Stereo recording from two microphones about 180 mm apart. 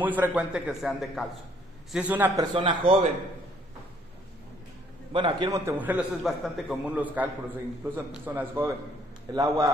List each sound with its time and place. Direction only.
0.0 s a man's voice: 10° right (ahead or behind)
2.5 s speech: 30° right (ahead or behind)
5.1 s a man's voice: 25° right (ahead or behind)